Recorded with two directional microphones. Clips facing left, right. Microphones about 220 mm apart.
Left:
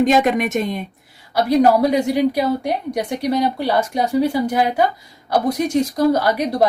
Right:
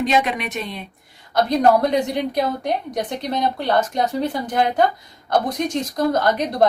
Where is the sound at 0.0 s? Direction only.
45° left (ahead or behind).